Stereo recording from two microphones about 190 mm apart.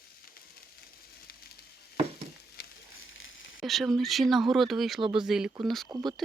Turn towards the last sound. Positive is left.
turn(degrees=-20)  # may be behind; listen again after turning